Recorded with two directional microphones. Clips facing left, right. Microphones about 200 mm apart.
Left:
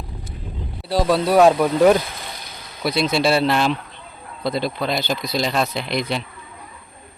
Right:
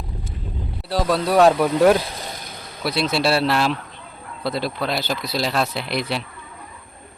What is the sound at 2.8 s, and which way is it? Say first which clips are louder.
Speech: left 2 dB; centre (ahead or behind).